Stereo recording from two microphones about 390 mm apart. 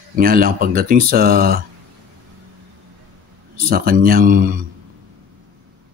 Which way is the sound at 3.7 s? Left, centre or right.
Right.